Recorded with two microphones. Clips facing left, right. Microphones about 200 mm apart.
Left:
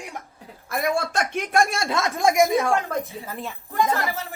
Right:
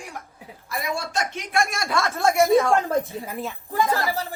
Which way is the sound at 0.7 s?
55° left (ahead or behind).